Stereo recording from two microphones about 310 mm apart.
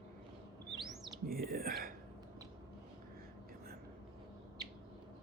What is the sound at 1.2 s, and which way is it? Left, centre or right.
Whispering, right.